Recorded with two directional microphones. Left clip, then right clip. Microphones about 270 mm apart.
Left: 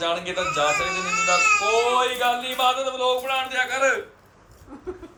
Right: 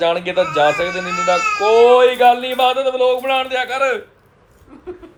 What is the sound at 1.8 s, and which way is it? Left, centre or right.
A man's voice, right.